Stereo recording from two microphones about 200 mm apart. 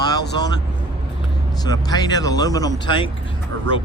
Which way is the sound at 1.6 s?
20° left (ahead or behind).